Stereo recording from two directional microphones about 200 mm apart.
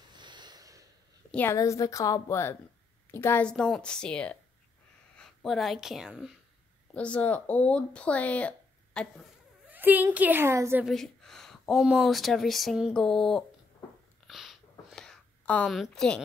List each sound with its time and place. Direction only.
0.1 s snort: 20° right (ahead or behind)
1.3 s a woman's voice: 10° left (ahead or behind)
9.7 s a woman's voice: 10° right (ahead or behind)
10.9 s speech: centre (ahead or behind)
14.2 s a sound: centre (ahead or behind)